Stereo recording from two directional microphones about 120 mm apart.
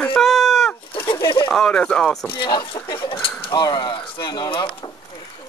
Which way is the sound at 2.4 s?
40° left (ahead or behind).